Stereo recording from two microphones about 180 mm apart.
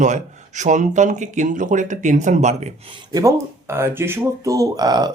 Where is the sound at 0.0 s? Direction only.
40° right (ahead or behind).